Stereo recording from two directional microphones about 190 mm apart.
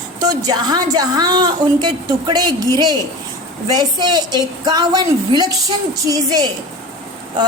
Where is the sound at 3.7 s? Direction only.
20° right (ahead or behind).